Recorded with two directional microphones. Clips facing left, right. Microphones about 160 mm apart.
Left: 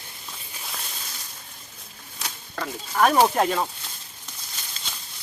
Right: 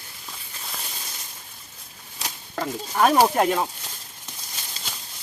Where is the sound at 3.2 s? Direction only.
10° right (ahead or behind).